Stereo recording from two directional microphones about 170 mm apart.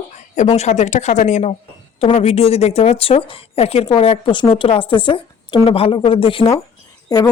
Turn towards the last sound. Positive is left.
turn(degrees=20)  # may be behind; listen again after turning